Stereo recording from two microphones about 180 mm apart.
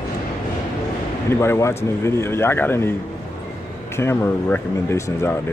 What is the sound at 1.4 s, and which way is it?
Speech, 15° left (ahead or behind).